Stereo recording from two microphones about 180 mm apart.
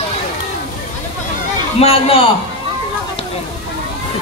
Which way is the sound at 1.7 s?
35° left (ahead or behind).